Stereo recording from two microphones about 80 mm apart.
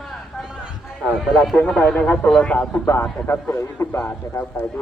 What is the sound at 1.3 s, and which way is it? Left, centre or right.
Speech, centre.